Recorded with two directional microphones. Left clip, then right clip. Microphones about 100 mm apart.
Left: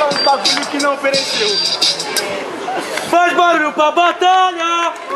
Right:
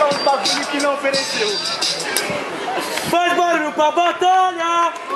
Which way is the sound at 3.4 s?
15° left (ahead or behind).